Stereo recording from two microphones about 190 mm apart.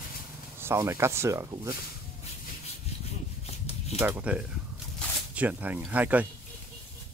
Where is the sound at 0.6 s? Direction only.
15° right (ahead or behind).